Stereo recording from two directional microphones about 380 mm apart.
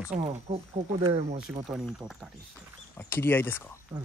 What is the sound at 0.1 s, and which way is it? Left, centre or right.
Speech, centre.